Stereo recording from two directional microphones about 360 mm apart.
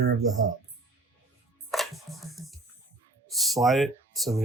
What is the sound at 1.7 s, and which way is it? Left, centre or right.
Music, centre.